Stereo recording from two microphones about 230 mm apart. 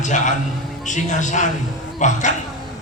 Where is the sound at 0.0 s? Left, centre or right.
Left.